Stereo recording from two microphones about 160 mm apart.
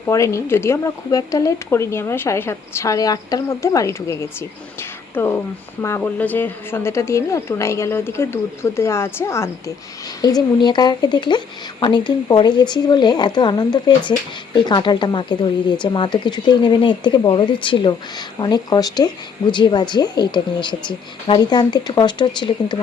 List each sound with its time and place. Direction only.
0.0 s speech: 20° left (ahead or behind)